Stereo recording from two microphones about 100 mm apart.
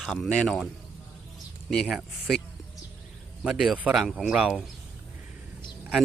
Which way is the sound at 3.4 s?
5° right (ahead or behind).